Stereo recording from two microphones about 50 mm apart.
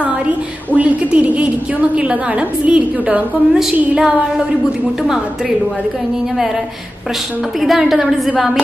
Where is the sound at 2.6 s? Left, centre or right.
Right.